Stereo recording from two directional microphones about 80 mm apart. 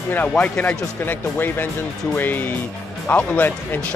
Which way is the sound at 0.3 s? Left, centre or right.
Centre.